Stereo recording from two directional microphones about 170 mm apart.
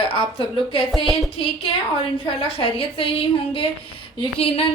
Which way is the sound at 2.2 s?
35° left (ahead or behind).